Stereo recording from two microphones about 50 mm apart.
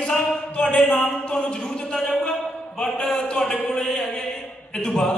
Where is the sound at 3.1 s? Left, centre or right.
Centre.